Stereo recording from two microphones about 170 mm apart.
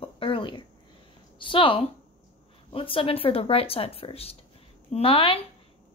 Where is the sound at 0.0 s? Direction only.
30° left (ahead or behind).